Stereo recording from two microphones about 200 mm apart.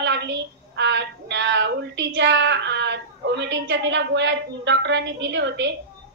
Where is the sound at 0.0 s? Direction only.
60° right (ahead or behind).